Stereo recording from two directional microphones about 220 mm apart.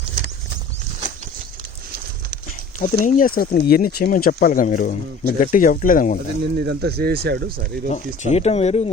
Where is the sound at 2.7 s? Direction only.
35° left (ahead or behind).